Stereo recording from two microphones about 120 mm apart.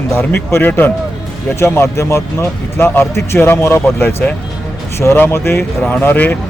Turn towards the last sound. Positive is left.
turn(degrees=15)  # may be behind; listen again after turning